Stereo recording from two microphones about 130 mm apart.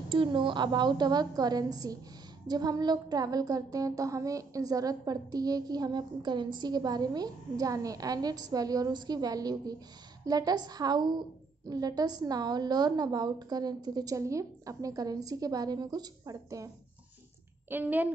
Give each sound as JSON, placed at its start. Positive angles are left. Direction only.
{"t": 0.1, "sound": "a woman's voice", "side_deg": -40}
{"t": 17.6, "sound": "a woman's voice", "side_deg": -15}